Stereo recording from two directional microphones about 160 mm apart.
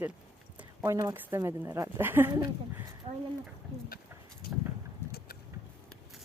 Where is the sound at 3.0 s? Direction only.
40° right (ahead or behind).